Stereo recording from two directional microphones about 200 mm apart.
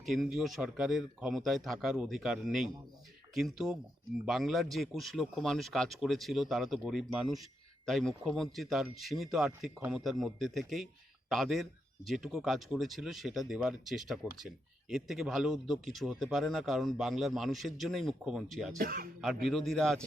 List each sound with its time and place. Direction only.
0.0 s speech: centre (ahead or behind)
18.8 s speech: 45° right (ahead or behind)
19.2 s speech: centre (ahead or behind)